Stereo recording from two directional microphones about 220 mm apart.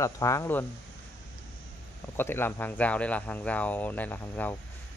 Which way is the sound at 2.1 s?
10° left (ahead or behind).